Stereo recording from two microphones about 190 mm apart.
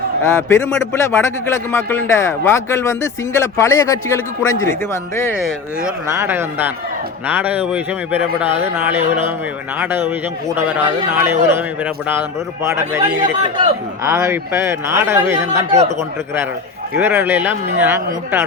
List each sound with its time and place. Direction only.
0.2 s a man's voice: 15° left (ahead or behind)
6.1 s speech: 10° right (ahead or behind)
14.0 s speech: 15° right (ahead or behind)
15.5 s speech: 35° right (ahead or behind)
17.0 s speech: 10° right (ahead or behind)